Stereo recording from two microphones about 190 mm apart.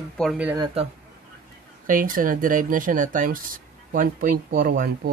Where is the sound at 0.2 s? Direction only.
5° right (ahead or behind).